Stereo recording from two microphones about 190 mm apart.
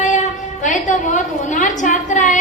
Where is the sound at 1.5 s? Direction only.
40° left (ahead or behind).